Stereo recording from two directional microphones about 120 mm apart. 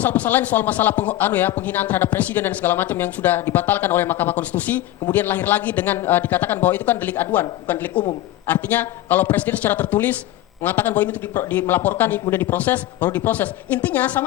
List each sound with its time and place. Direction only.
0.0 s speech: 15° left (ahead or behind)